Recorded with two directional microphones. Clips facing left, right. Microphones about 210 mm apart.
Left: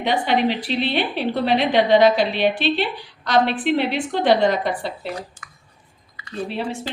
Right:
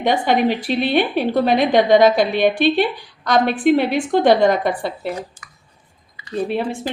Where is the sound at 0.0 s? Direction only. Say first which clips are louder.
Right 3 dB; 45° right (ahead or behind).